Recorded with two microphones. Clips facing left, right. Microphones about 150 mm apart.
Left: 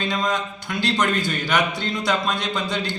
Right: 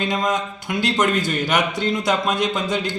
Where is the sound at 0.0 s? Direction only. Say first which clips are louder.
Right 2 dB; 15° right (ahead or behind).